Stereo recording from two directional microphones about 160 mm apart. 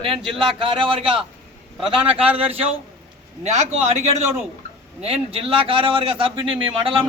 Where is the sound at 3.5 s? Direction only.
45° right (ahead or behind).